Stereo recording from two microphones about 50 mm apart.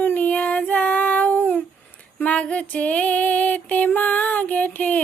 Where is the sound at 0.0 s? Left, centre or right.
Left.